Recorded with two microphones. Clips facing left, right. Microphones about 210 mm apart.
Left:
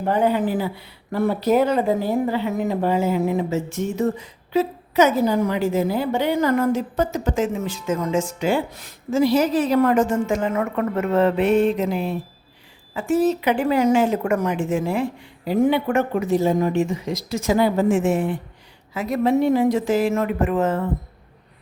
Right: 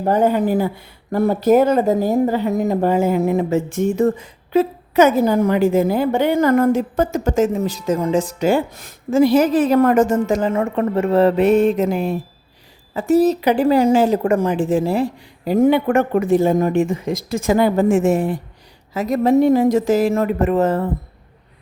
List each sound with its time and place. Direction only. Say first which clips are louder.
0.0 s speech: right 3 dB; 45° right (ahead or behind)